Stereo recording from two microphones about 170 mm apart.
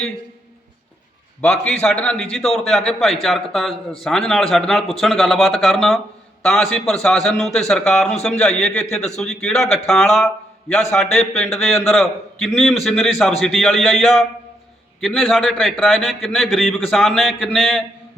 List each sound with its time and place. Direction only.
1.4 s a man's voice: 5° left (ahead or behind)